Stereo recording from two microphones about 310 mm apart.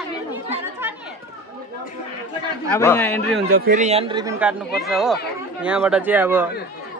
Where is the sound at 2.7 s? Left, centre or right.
Centre.